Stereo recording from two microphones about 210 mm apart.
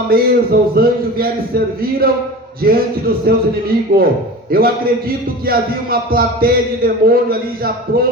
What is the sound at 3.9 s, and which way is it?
A man's voice, 45° right (ahead or behind).